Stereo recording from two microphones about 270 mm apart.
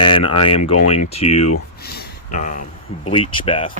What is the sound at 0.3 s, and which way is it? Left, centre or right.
Speech, left.